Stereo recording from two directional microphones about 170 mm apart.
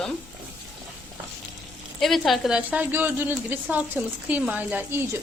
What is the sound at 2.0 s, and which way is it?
A woman's voice, centre (ahead or behind).